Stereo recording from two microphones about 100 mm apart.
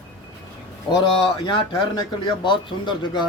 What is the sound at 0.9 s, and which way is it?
A man's voice, 50° left (ahead or behind).